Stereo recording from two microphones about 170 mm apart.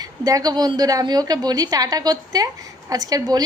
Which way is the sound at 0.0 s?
20° right (ahead or behind).